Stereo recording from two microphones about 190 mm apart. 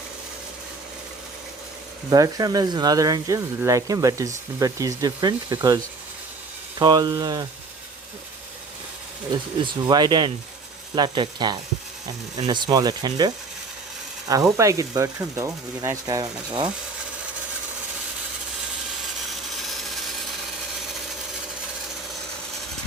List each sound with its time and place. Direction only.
2.0 s speech: 20° right (ahead or behind)
9.3 s speech: 20° right (ahead or behind)
19.6 s rub: centre (ahead or behind)